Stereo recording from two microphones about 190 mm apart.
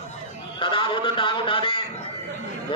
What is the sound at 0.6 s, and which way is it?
A man's voice, 25° left (ahead or behind).